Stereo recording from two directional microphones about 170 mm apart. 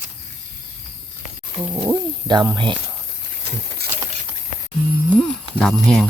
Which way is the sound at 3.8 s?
70° right (ahead or behind).